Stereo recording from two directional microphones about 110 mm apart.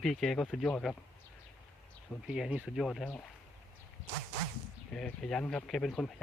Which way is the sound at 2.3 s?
5° right (ahead or behind).